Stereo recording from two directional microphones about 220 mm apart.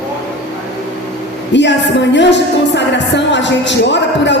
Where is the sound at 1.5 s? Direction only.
55° left (ahead or behind).